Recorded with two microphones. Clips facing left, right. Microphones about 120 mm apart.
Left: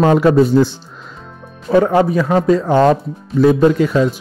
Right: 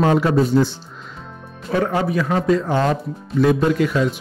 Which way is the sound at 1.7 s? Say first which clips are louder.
Left 7 dB; 30° left (ahead or behind).